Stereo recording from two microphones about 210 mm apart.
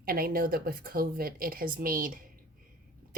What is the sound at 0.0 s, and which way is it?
Speech, 45° right (ahead or behind).